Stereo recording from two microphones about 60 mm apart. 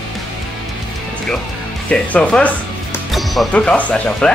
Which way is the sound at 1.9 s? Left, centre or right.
Left.